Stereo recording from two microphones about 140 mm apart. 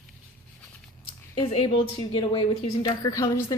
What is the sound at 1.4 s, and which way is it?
A woman's voice, 40° left (ahead or behind).